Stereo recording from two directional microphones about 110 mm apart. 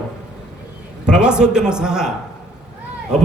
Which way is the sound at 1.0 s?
10° right (ahead or behind).